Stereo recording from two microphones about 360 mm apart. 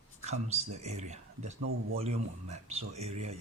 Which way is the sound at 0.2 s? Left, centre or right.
Centre.